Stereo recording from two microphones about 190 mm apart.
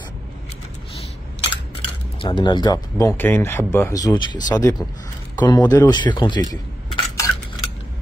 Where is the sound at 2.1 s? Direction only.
25° left (ahead or behind).